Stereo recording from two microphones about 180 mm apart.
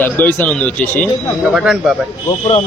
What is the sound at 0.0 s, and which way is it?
Speech, 10° left (ahead or behind).